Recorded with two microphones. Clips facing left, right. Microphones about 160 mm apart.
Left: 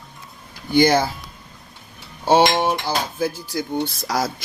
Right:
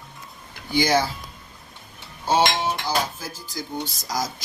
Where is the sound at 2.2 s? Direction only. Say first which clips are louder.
Left 5 dB; 65° left (ahead or behind).